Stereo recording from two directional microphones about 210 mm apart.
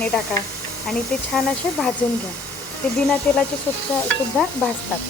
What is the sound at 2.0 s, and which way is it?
Speech, 5° left (ahead or behind).